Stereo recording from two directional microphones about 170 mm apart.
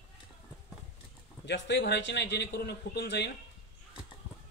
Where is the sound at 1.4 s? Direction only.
90° left.